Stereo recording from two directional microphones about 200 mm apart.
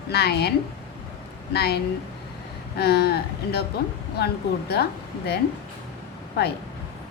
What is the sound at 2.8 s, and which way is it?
A woman's voice, 55° left (ahead or behind).